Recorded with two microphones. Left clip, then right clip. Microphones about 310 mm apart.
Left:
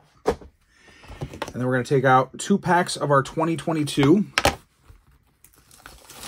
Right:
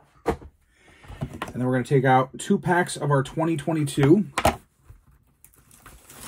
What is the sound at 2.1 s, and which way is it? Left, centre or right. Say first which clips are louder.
Speech: left 2 dB; centre.